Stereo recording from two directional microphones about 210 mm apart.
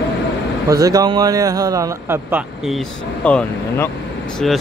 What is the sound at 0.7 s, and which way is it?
Speech, 15° right (ahead or behind).